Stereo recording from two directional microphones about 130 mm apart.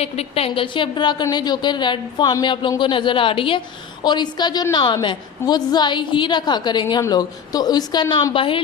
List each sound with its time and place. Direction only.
0.0 s a woman's voice: 50° left (ahead or behind); by 8.3 s 30° left (ahead or behind)
8.3 s a woman's voice: 40° left (ahead or behind)